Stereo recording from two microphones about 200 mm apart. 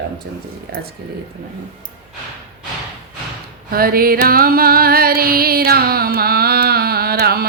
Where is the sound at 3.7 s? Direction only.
45° right (ahead or behind).